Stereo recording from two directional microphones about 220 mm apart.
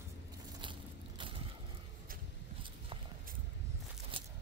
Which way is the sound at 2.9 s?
25° right (ahead or behind).